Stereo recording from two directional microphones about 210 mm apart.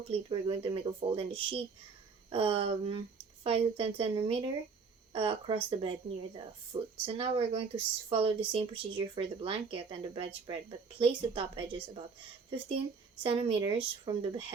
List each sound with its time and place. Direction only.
0.1 s speech: 25° right (ahead or behind)